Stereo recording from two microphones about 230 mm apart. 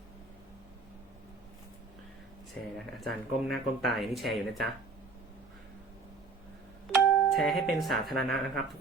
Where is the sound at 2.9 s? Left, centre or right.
Centre.